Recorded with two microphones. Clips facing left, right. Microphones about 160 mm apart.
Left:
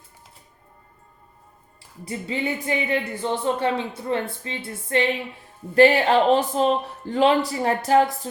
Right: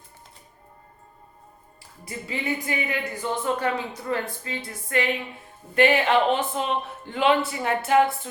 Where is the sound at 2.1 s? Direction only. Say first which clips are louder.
Left 3 dB; 30° left (ahead or behind).